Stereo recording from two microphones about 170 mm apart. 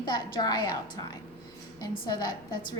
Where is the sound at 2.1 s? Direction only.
25° left (ahead or behind).